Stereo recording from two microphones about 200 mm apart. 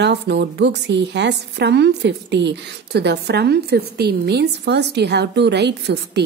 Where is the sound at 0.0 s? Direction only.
55° right (ahead or behind).